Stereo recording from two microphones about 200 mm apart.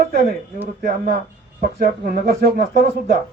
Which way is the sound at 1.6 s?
45° right (ahead or behind).